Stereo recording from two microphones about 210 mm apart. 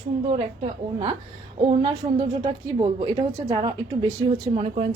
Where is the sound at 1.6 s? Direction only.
25° right (ahead or behind).